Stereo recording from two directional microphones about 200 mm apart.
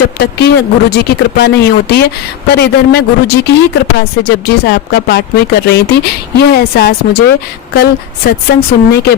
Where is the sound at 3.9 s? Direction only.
50° left (ahead or behind).